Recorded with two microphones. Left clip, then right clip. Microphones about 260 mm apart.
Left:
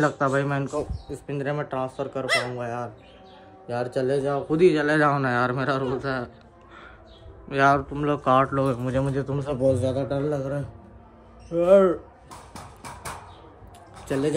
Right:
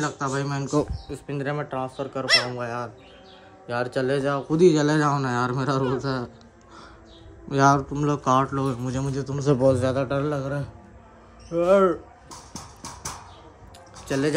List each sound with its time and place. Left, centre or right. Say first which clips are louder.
0.0 s speech: left 5 dB; centre
4.3 s speech: right 2 dB; centre
7.4 s speech: even; centre
14.0 s speech: right 1 dB; centre